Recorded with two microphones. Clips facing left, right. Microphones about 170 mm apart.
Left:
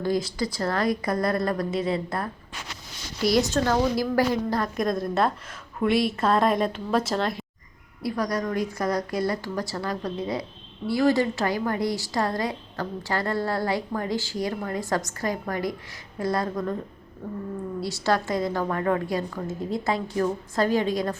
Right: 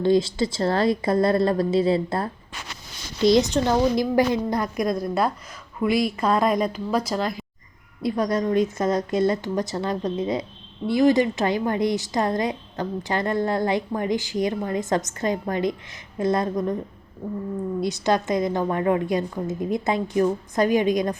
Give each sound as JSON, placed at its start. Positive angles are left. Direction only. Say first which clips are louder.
{"t": 0.0, "sound": "a woman's voice", "louder": "right 6 dB", "side_deg": -25}
{"t": 4.8, "sound": "a woman's voice", "louder": "right 1 dB", "side_deg": 0}
{"t": 8.0, "sound": "a woman's voice", "louder": "right 4 dB", "side_deg": -20}
{"t": 17.7, "sound": "a woman's voice", "louder": "right 2 dB", "side_deg": -20}